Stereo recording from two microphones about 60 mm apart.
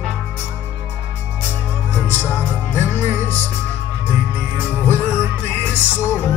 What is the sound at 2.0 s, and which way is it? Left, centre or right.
Music, left.